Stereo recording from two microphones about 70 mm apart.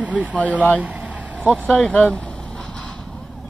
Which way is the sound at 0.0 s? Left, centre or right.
Centre.